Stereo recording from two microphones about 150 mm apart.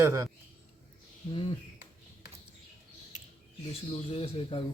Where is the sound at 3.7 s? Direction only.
40° left (ahead or behind).